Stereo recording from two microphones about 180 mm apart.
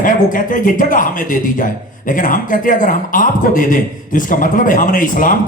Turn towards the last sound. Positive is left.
turn(degrees=50)  # may be behind; listen again after turning